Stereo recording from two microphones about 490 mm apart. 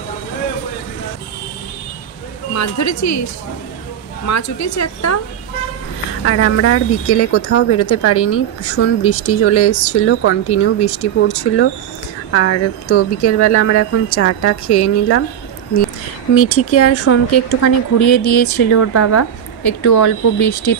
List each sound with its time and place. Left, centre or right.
2.5 s a woman's voice: left
4.3 s a woman's voice: left
6.2 s speech: left
16.3 s a woman's voice: left